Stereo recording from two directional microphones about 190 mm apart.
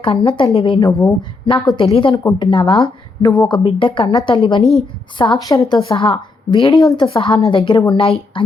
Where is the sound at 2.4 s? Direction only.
25° left (ahead or behind).